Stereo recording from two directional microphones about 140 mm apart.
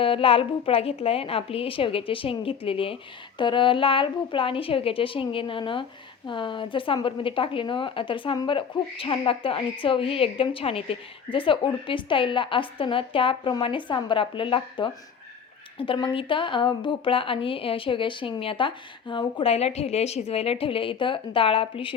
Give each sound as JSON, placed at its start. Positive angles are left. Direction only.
{"t": 0.0, "sound": "a woman's voice", "side_deg": 40}